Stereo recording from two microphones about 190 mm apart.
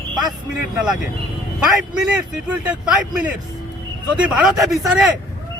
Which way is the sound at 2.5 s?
5° right (ahead or behind).